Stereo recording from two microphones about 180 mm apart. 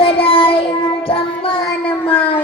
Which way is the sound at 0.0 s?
30° left (ahead or behind).